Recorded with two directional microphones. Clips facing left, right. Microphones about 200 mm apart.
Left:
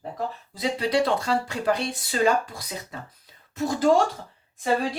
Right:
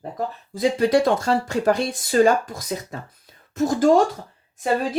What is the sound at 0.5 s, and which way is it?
Speech, 45° right (ahead or behind).